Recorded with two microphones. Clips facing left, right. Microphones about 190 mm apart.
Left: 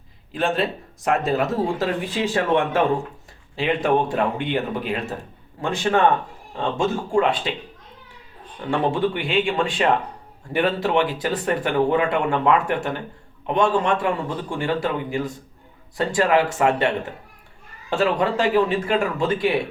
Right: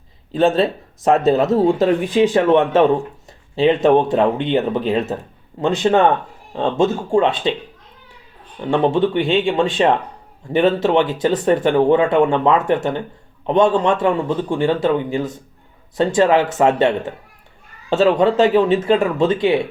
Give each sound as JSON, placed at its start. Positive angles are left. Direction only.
{"t": 0.3, "sound": "speech", "side_deg": -25}
{"t": 8.7, "sound": "speech", "side_deg": -25}